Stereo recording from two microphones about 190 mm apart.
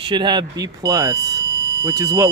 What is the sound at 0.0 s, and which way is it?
Speech, 25° right (ahead or behind).